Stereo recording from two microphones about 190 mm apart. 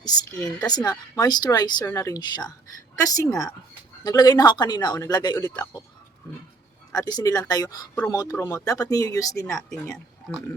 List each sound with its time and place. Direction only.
0.0 s speech: 20° left (ahead or behind)
6.9 s speech: 20° left (ahead or behind)
9.6 s speech: 5° left (ahead or behind)